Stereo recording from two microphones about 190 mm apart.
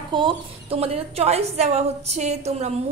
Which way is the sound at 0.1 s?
25° right (ahead or behind).